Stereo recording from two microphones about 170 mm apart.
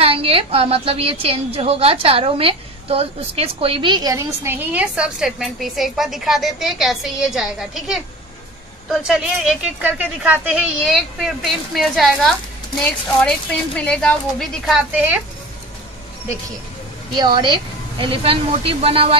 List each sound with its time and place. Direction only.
0.0 s a woman's voice: 35° right (ahead or behind); by 12.4 s centre (ahead or behind)
13.7 s speech: 5° left (ahead or behind)
14.7 s a woman's voice: 5° right (ahead or behind)
17.1 s speech: 25° right (ahead or behind)